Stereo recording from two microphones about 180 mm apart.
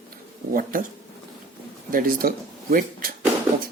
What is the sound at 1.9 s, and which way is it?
Speech, 55° right (ahead or behind).